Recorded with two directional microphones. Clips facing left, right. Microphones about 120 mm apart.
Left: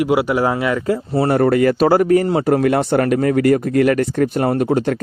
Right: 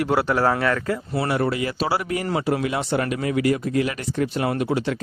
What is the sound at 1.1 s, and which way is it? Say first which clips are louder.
A man's voice: left 9 dB; 45° left (ahead or behind).